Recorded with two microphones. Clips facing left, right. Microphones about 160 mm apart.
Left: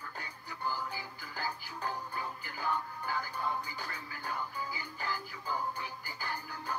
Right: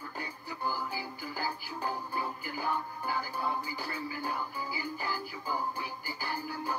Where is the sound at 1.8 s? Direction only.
35° right (ahead or behind).